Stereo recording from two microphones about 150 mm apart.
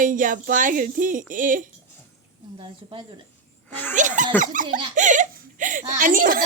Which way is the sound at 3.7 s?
10° left (ahead or behind).